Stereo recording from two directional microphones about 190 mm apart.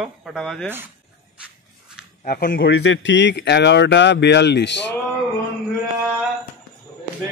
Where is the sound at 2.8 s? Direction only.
75° left (ahead or behind).